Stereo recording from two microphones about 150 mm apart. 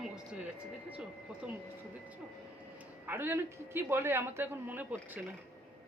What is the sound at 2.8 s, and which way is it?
A woman's voice, 15° right (ahead or behind).